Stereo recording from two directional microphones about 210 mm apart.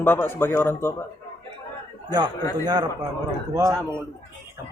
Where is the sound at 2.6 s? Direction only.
20° right (ahead or behind).